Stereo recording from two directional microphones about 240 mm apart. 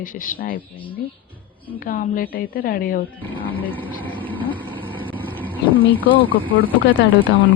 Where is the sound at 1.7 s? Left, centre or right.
Left.